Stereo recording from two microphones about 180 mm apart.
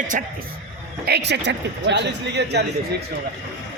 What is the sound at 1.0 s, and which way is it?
Speech, 70° right (ahead or behind).